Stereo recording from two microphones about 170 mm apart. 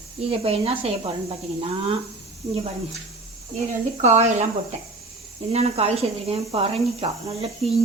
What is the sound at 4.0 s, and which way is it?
Speech, 45° right (ahead or behind).